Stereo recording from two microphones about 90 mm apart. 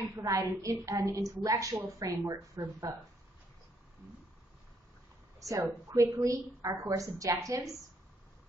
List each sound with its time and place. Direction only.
0.1 s a woman's voice: 35° right (ahead or behind)
5.4 s a woman's voice: 40° right (ahead or behind)